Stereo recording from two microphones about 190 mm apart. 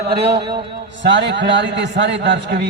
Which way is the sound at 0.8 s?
70° right (ahead or behind).